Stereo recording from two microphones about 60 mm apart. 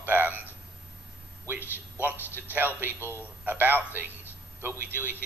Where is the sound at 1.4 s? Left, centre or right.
Right.